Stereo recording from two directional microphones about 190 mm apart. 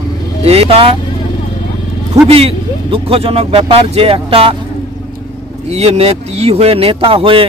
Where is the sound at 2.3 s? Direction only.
30° right (ahead or behind).